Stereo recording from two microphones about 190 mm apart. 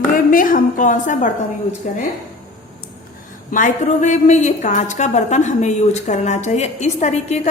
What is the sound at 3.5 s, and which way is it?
A woman's voice, 45° left (ahead or behind).